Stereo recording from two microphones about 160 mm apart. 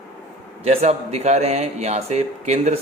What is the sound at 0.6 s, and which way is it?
A man's voice, 40° right (ahead or behind).